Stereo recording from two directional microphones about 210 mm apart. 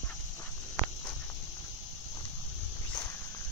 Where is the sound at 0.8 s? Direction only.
10° left (ahead or behind).